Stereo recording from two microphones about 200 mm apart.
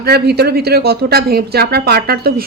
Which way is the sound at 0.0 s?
55° right (ahead or behind).